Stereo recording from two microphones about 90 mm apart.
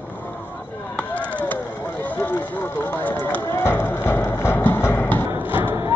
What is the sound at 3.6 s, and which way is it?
Music, 25° left (ahead or behind).